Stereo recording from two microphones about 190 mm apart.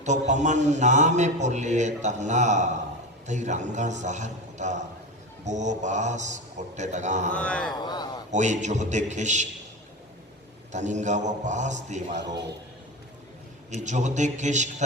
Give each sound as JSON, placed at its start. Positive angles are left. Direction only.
{"t": 0.0, "sound": "a man's voice", "side_deg": -40}
{"t": 7.3, "sound": "speech", "side_deg": 5}
{"t": 7.8, "sound": "a sound", "side_deg": 20}
{"t": 8.3, "sound": "a man's voice", "side_deg": -40}
{"t": 10.7, "sound": "a man's voice", "side_deg": -40}
{"t": 13.8, "sound": "a man's voice", "side_deg": -40}